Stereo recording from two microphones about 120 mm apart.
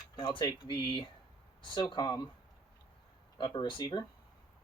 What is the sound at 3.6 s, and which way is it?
Speech, 40° left (ahead or behind).